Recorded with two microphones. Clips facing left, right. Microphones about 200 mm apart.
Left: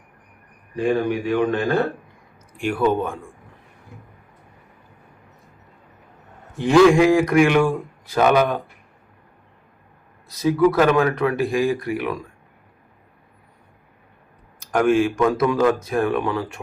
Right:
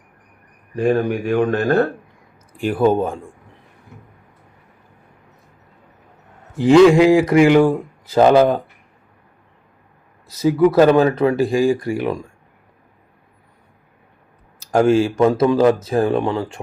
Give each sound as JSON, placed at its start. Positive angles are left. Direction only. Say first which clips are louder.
{"t": 0.8, "sound": "speech", "louder": "right 3 dB", "side_deg": -50}
{"t": 2.6, "sound": "speech", "louder": "right 4 dB", "side_deg": -35}
{"t": 6.7, "sound": "a man's voice", "louder": "right 3 dB", "side_deg": -25}
{"t": 10.4, "sound": "a man's voice", "louder": "right 4 dB", "side_deg": -25}
{"t": 14.7, "sound": "a man's voice", "louder": "right 3 dB", "side_deg": -25}